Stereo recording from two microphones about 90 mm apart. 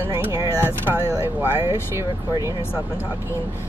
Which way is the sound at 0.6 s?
25° right (ahead or behind).